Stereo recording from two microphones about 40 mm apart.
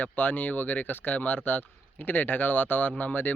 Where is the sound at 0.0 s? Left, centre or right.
Left.